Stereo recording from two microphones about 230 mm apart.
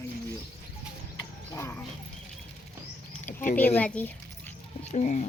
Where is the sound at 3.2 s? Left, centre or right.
Left.